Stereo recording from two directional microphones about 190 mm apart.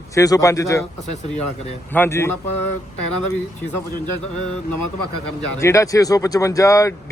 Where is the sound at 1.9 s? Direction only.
10° left (ahead or behind).